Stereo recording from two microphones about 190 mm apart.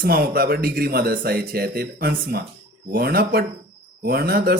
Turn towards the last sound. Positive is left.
turn(degrees=-55)  # may be behind; listen again after turning